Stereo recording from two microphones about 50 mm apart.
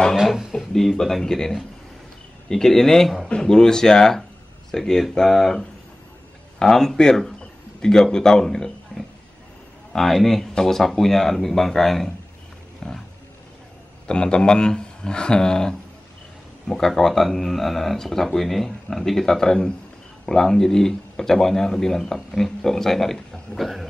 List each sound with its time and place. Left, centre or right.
0.1 s speech: centre
0.7 s speech: centre
3.3 s speech: centre
12.8 s roaring cats: centre
14.0 s speech: centre